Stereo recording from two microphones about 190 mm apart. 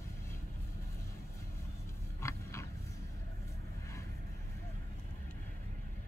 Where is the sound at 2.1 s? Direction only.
15° left (ahead or behind).